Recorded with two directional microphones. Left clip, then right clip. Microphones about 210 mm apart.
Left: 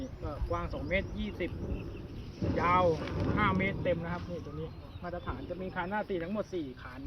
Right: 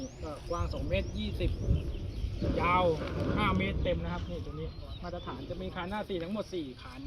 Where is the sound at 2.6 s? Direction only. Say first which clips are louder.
Left 1 dB; 20° right (ahead or behind).